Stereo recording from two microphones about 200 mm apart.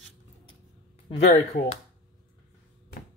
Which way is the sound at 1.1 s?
35° left (ahead or behind).